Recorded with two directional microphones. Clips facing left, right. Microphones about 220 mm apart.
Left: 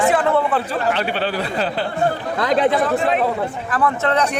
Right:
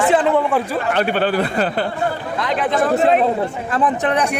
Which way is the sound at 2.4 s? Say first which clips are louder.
Left 4 dB; 40° left (ahead or behind).